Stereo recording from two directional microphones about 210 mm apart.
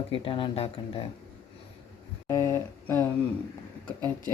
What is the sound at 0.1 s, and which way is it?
Speech, 25° left (ahead or behind).